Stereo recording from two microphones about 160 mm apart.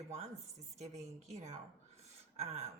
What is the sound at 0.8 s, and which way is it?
Speech, 45° right (ahead or behind).